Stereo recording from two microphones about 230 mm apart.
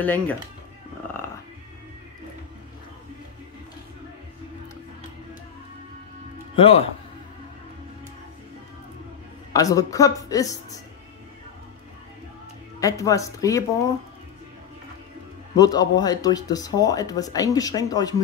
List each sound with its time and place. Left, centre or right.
0.0 s speech: centre
6.5 s speech: left
9.5 s speech: centre
12.8 s speech: centre
15.5 s speech: centre